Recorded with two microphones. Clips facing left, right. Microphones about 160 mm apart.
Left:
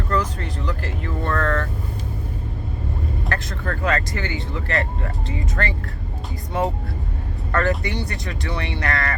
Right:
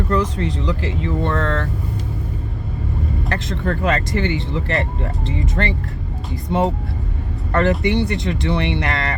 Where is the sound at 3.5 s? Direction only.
25° right (ahead or behind).